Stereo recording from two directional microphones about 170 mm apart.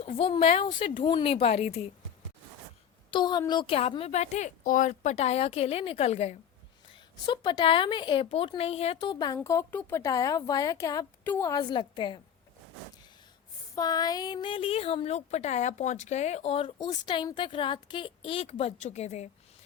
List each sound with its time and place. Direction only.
0.0 s speech: 35° left (ahead or behind)
3.1 s speech: 25° left (ahead or behind)
6.9 s speech: 25° left (ahead or behind)
13.7 s speech: 25° left (ahead or behind)
16.7 s speech: 25° left (ahead or behind); by 19.3 s 40° left (ahead or behind)